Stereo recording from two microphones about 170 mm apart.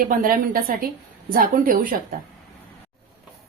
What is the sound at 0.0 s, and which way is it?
A woman's voice, 55° right (ahead or behind).